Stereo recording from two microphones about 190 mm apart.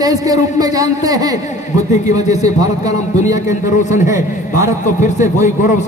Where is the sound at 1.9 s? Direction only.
35° left (ahead or behind).